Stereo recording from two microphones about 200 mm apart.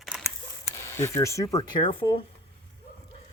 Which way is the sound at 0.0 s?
Centre (ahead or behind).